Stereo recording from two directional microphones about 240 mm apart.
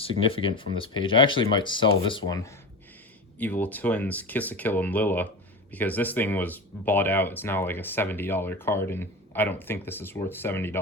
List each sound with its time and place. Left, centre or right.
0.0 s speech: left